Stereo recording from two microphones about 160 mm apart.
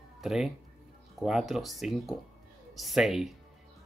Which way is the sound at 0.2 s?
Centre (ahead or behind).